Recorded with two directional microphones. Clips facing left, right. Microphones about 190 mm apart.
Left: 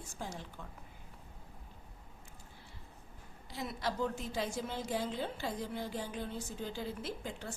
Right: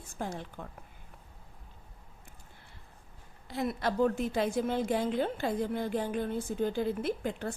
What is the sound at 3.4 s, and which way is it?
A woman's voice, 55° right (ahead or behind).